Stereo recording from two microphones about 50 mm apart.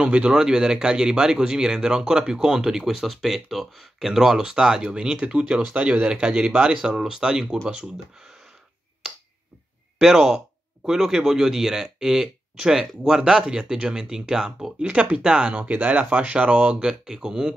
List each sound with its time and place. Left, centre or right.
0.0 s speech: right
9.9 s speech: centre
14.8 s speech: right
15.5 s speech: right; by 17.6 s centre